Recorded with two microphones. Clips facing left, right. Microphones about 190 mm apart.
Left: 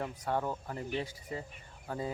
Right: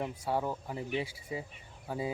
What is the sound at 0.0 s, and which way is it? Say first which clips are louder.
Speech: right 1 dB; 10° right (ahead or behind).